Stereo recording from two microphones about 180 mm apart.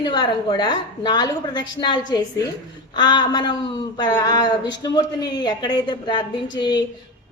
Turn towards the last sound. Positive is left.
turn(degrees=25)  # may be behind; listen again after turning